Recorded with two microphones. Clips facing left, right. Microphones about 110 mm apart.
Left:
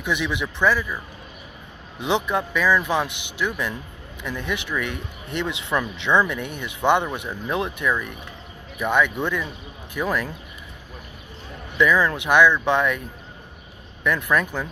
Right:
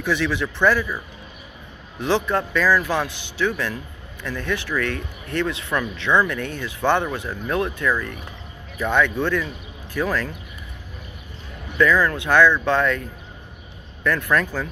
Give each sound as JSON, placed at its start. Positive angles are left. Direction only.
{"t": 0.0, "sound": "speech", "side_deg": 15}
{"t": 2.0, "sound": "speech", "side_deg": 20}
{"t": 8.7, "sound": "speech", "side_deg": 10}
{"t": 11.8, "sound": "speech", "side_deg": 20}
{"t": 14.0, "sound": "speech", "side_deg": 15}